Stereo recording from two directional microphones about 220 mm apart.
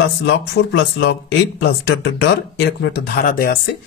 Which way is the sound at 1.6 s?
50° left (ahead or behind).